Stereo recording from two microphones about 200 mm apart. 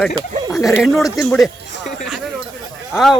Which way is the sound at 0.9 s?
15° left (ahead or behind).